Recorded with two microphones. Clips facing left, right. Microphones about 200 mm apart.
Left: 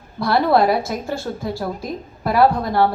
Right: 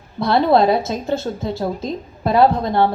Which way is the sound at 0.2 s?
20° right (ahead or behind).